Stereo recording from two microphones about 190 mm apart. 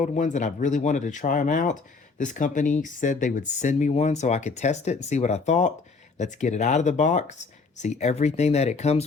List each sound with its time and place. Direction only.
0.0 s speech: 40° left (ahead or behind)